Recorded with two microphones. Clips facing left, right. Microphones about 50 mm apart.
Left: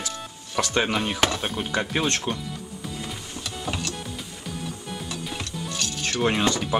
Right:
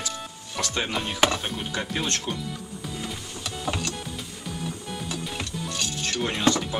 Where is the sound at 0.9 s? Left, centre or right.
Centre.